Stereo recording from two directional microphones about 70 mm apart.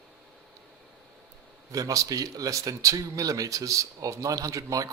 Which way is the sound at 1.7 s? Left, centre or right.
Right.